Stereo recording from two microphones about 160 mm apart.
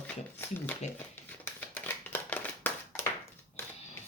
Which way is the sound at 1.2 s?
10° left (ahead or behind).